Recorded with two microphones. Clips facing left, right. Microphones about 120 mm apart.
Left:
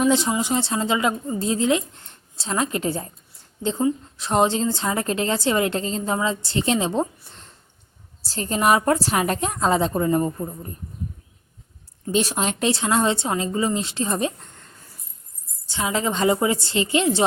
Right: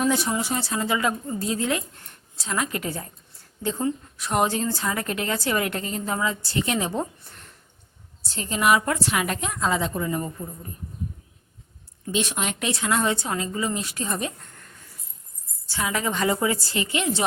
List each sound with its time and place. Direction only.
0.0 s a woman's voice: 20° left (ahead or behind)
8.2 s a woman's voice: 35° left (ahead or behind)
12.1 s a woman's voice: 35° left (ahead or behind)